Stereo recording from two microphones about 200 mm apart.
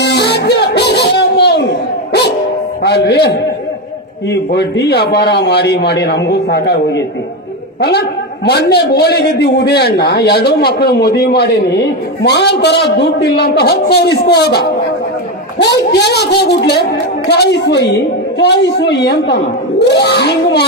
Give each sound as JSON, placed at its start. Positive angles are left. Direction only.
{"t": 0.0, "sound": "a sound", "side_deg": 55}
{"t": 2.8, "sound": "a man's voice", "side_deg": 55}
{"t": 8.5, "sound": "a man's voice", "side_deg": 55}